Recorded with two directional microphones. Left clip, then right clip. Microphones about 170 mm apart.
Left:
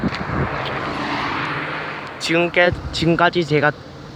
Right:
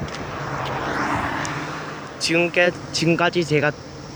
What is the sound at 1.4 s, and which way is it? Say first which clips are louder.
Vehicle: left 4 dB; 50° right (ahead or behind).